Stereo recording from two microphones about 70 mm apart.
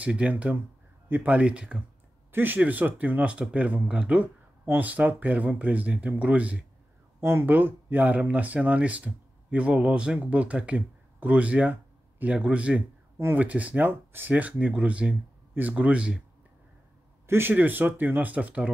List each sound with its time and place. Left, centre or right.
0.0 s speech: centre
1.0 s a sound: right
1.3 s speech: centre
2.3 s speech: right
7.2 s speech: right; by 16.2 s centre
17.3 s speech: right